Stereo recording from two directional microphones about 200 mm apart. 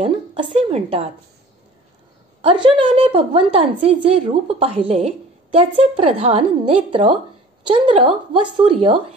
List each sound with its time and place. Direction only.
0.0 s a woman's voice: 25° right (ahead or behind)
2.4 s a woman's voice: 25° right (ahead or behind)